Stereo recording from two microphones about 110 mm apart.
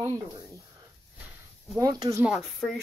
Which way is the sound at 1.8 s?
35° right (ahead or behind).